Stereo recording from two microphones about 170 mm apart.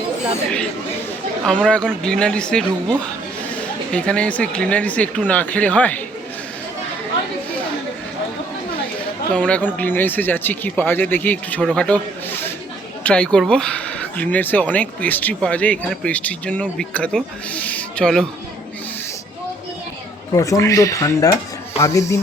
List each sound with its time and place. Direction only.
1.5 s speech: 5° left (ahead or behind)
9.3 s speech: 5° left (ahead or behind)
20.3 s speech: 20° left (ahead or behind)